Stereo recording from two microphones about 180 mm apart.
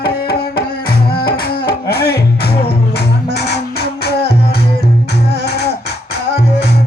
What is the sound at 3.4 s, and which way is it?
Music, 65° left (ahead or behind).